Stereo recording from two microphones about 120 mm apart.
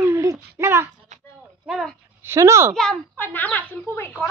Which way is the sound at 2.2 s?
20° right (ahead or behind).